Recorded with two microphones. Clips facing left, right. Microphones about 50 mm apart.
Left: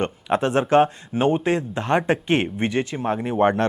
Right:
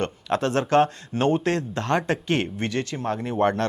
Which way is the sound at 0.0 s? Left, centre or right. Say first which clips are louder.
Left 3 dB; centre.